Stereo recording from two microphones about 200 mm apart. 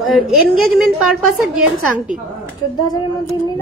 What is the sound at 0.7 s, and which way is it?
Speech, 5° right (ahead or behind).